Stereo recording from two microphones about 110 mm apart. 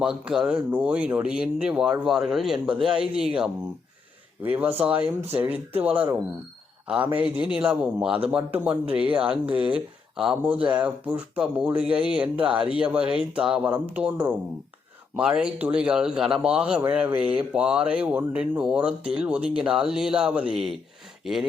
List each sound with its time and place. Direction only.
0.0 s a man's voice: 5° right (ahead or behind)
6.8 s a man's voice: 10° right (ahead or behind)